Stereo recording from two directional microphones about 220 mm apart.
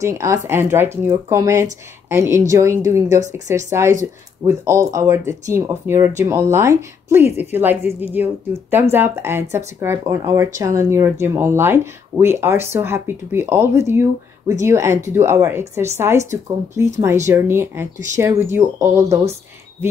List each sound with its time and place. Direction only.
0.0 s speech: 15° right (ahead or behind)